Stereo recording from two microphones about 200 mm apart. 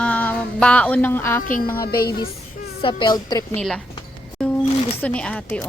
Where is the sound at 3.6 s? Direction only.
5° left (ahead or behind).